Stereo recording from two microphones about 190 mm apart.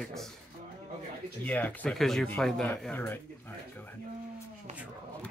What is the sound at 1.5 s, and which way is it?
Speech, 10° left (ahead or behind).